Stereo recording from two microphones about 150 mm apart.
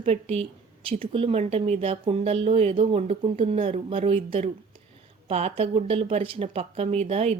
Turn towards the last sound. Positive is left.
turn(degrees=-45)  # may be behind; listen again after turning